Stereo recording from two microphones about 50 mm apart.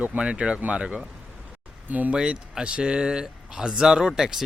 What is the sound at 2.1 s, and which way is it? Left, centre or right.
Speech, centre.